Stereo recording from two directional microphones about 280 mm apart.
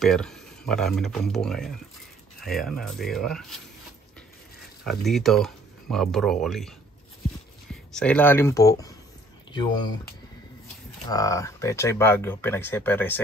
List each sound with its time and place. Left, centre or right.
0.0 s speech: centre
4.8 s speech: centre
7.9 s speech: centre
11.1 s speech: centre